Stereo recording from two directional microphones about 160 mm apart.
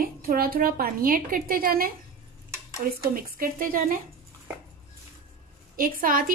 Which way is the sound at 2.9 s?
65° right (ahead or behind).